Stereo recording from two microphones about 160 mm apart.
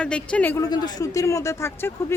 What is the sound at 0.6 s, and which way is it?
A man's voice, 25° left (ahead or behind).